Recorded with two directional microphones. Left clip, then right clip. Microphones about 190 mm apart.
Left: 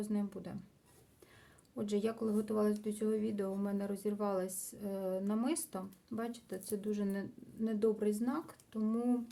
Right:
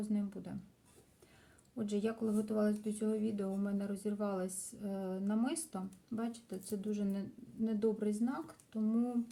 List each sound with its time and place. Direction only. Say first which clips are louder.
0.1 s speech: left 1 dB; 35° left (ahead or behind)
1.7 s speech: left 2 dB; 35° left (ahead or behind)